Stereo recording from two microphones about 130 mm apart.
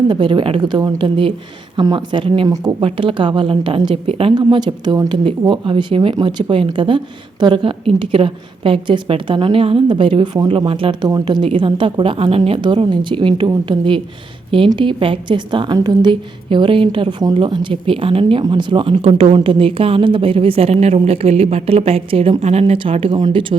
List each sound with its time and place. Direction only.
0.1 s a woman's voice: 40° right (ahead or behind)